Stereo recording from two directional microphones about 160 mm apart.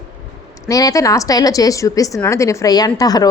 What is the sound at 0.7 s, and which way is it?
A woman's voice, 20° left (ahead or behind).